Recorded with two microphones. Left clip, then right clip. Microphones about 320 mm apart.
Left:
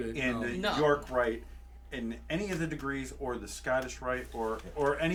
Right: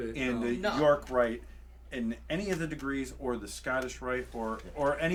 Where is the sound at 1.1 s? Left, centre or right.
Right.